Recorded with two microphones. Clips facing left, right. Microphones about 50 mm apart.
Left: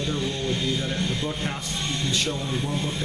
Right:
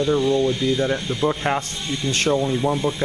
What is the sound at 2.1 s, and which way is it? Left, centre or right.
Speech, right.